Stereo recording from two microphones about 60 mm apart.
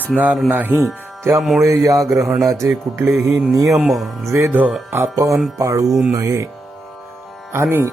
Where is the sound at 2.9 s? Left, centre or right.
Right.